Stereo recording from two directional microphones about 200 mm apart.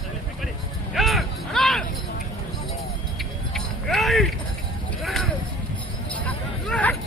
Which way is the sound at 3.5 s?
Centre (ahead or behind).